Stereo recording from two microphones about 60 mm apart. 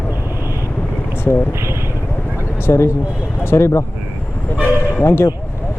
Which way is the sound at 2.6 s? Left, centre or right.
Left.